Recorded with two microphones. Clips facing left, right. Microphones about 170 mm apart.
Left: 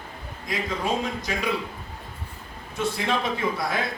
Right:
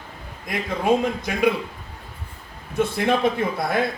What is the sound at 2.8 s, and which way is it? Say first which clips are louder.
A man's voice: right 6 dB; 55° right (ahead or behind).